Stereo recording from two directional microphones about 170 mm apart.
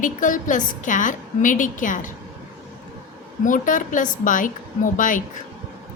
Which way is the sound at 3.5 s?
50° left (ahead or behind).